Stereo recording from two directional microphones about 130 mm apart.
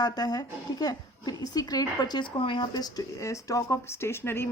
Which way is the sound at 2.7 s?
30° left (ahead or behind).